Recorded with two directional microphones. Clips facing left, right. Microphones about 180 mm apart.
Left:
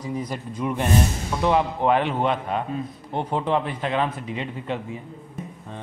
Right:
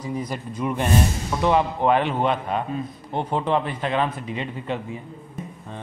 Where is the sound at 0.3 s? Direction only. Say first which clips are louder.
Right 1 dB; 5° right (ahead or behind).